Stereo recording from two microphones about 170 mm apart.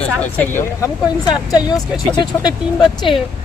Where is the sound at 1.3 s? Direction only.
25° left (ahead or behind).